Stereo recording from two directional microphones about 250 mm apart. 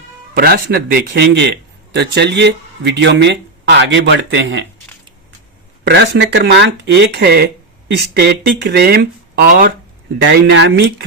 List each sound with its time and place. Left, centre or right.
0.3 s a man's voice: right
5.8 s a man's voice: right